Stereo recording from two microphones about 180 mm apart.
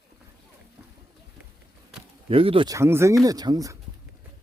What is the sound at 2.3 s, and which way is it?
Speech, 30° right (ahead or behind).